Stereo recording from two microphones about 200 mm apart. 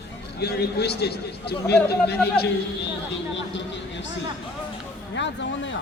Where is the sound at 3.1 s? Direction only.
65° left (ahead or behind).